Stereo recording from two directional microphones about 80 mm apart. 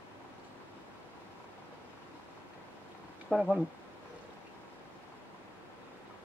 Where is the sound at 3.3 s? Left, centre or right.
Centre.